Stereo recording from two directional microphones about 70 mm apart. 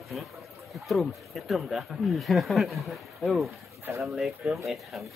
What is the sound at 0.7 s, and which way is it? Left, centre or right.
Speech, centre.